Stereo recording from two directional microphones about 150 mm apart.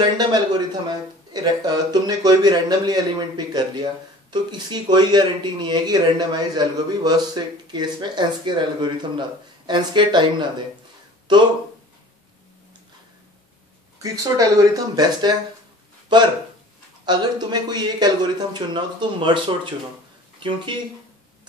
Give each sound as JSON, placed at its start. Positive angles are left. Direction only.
{"t": 0.0, "sound": "a man's voice", "side_deg": -30}
{"t": 14.0, "sound": "a man's voice", "side_deg": -25}